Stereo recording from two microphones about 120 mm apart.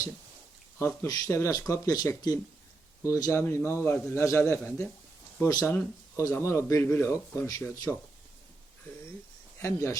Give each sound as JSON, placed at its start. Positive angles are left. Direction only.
{"t": 1.0, "sound": "speech", "side_deg": 30}
{"t": 9.6, "sound": "speech", "side_deg": 25}